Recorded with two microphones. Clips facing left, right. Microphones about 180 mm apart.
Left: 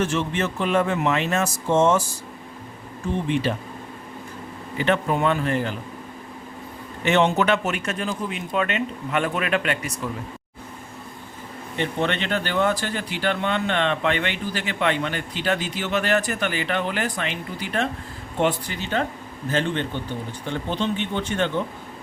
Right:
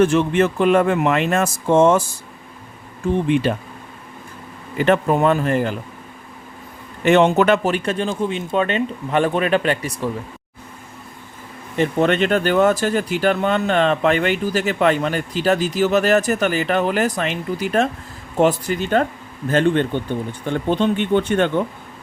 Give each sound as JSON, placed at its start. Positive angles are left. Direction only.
{"t": 0.0, "sound": "speech", "side_deg": -55}
{"t": 4.9, "sound": "speech", "side_deg": -45}
{"t": 7.0, "sound": "a man's voice", "side_deg": -50}
{"t": 11.8, "sound": "speech", "side_deg": -45}